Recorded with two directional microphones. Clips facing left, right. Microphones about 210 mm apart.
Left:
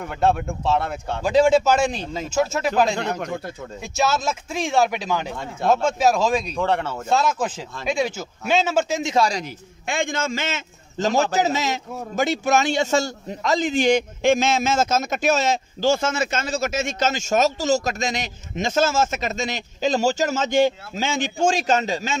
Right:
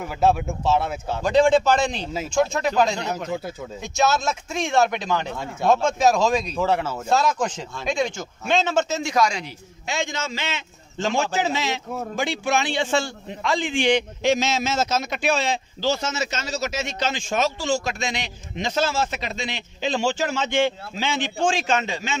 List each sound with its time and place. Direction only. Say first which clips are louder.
0.0 s a man's voice: right 1 dB; 5° right (ahead or behind); by 9.1 s 10° left (ahead or behind)
9.1 s speech: left 1 dB; 30° left (ahead or behind)
9.4 s a man's voice: left 3 dB; 55° left (ahead or behind)